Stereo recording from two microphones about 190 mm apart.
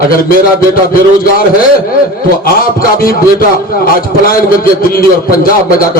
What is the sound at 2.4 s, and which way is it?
Speech, 50° left (ahead or behind).